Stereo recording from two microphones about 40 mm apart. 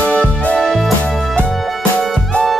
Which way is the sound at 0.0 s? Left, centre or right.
Left.